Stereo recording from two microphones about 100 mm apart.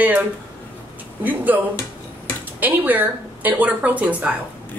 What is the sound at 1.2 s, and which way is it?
Speech, 15° right (ahead or behind).